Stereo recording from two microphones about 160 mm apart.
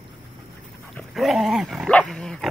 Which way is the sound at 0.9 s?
Centre (ahead or behind).